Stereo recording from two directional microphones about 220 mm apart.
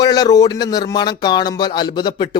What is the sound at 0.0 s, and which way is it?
Speech, 15° left (ahead or behind).